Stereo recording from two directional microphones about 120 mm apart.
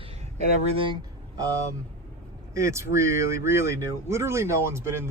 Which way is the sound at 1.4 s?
30° right (ahead or behind).